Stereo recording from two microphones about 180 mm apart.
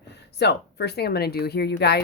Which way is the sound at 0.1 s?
70° left (ahead or behind).